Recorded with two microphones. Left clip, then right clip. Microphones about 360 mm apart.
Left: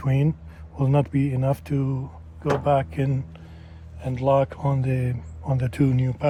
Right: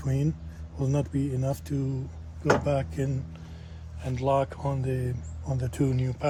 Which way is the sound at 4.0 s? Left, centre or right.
Left.